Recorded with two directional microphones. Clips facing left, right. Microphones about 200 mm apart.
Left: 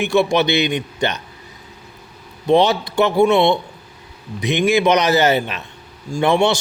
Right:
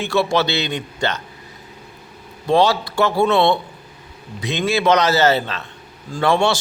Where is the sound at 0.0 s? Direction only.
15° left (ahead or behind).